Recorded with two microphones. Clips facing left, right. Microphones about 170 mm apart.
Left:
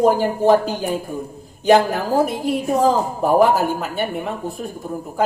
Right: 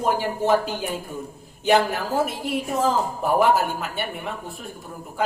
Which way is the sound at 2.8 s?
40° left (ahead or behind).